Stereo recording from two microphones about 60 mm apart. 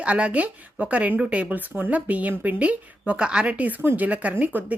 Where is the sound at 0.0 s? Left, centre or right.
Right.